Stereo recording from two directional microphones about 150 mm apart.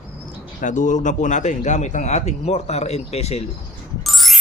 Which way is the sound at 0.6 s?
55° left (ahead or behind).